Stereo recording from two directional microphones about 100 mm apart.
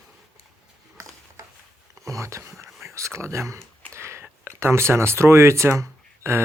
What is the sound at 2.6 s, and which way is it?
Whispering, 30° right (ahead or behind).